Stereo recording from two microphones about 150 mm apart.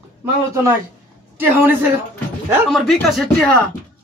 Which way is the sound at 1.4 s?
15° right (ahead or behind).